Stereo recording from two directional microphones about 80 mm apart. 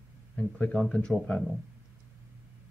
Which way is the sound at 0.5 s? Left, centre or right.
Centre.